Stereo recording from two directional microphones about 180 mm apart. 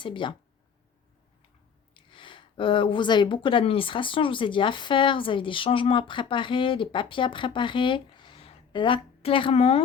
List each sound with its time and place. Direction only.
0.0 s speech: 25° left (ahead or behind)
1.9 s speech: 30° left (ahead or behind)